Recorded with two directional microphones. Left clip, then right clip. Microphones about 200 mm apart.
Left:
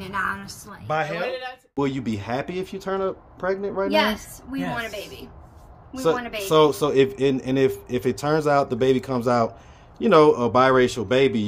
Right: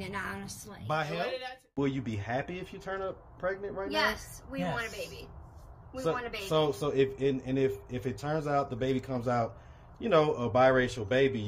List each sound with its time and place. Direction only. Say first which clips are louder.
0.0 s a woman's voice: left 11 dB; centre (ahead or behind)
1.8 s speech: left 8 dB; 20° left (ahead or behind)
6.0 s speech: left 10 dB; 30° left (ahead or behind)